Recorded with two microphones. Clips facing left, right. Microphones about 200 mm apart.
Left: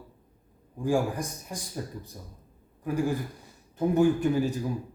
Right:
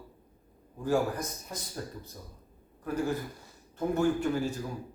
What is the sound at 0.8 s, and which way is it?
A man's voice, 15° left (ahead or behind).